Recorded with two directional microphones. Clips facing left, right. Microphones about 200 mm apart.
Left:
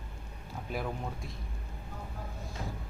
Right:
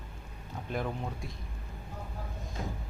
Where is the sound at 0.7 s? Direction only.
5° left (ahead or behind).